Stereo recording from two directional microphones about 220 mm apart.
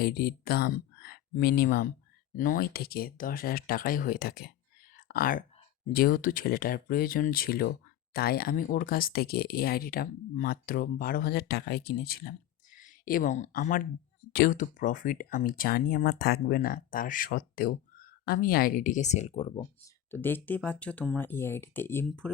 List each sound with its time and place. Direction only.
0.0 s speech: 45° left (ahead or behind)
4.9 s whispering: 40° left (ahead or behind)
5.9 s speech: 40° left (ahead or behind); by 19.6 s 25° left (ahead or behind)
20.1 s speech: 10° left (ahead or behind)